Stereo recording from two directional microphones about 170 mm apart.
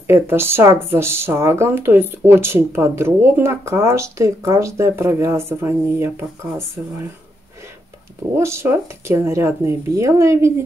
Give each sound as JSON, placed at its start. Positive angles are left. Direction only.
{"t": 0.0, "sound": "speech", "side_deg": -15}
{"t": 8.4, "sound": "speech", "side_deg": -15}